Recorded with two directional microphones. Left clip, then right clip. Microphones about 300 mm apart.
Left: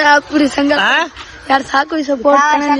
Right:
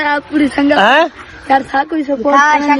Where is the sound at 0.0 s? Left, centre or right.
Left.